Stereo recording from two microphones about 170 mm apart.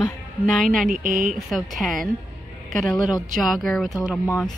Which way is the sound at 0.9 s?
55° right (ahead or behind).